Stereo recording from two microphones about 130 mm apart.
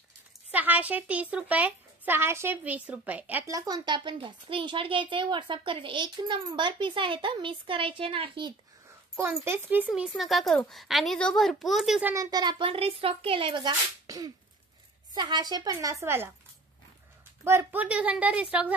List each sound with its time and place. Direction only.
0.5 s speech: 10° right (ahead or behind)
3.4 s a woman's voice: 25° right (ahead or behind)
9.4 s speech: 15° right (ahead or behind)
9.9 s speech: centre (ahead or behind)
12.0 s a woman's voice: 20° right (ahead or behind)
12.3 s a woman's voice: 30° right (ahead or behind)
14.0 s throat clearing: 25° right (ahead or behind)
15.1 s a woman's voice: 35° right (ahead or behind)
17.4 s speech: 20° right (ahead or behind)